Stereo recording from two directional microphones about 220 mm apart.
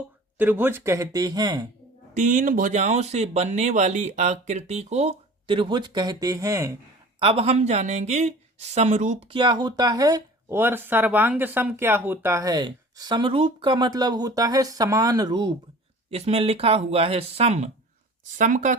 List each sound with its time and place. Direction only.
0.3 s a woman's voice: 10° right (ahead or behind)
2.1 s speech: 35° right (ahead or behind); by 6.7 s 15° right (ahead or behind)
7.2 s a woman's voice: 25° right (ahead or behind)